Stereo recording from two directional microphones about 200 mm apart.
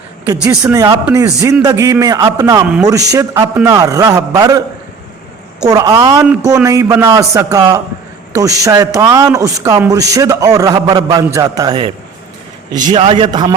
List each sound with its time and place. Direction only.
0.3 s a man's voice: 5° right (ahead or behind)
0.6 s a man's voice: 20° right (ahead or behind)
5.6 s a man's voice: 20° right (ahead or behind)